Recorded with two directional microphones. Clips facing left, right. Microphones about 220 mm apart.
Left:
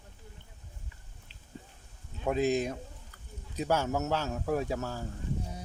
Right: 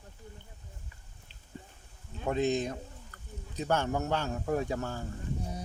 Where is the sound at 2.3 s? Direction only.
10° left (ahead or behind).